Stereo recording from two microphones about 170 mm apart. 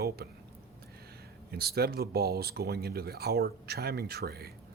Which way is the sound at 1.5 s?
70° right (ahead or behind).